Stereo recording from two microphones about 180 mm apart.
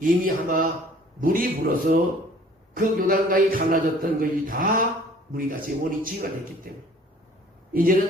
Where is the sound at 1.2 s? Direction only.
50° right (ahead or behind).